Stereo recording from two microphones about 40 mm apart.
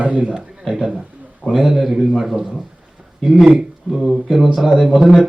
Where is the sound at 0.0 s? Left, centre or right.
Right.